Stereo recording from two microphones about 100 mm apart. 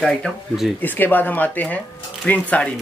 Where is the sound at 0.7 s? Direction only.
20° left (ahead or behind).